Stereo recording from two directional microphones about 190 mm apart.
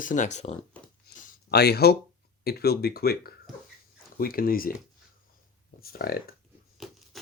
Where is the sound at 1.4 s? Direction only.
55° left (ahead or behind).